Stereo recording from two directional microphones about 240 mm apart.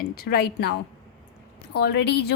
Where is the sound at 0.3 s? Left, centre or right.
Left.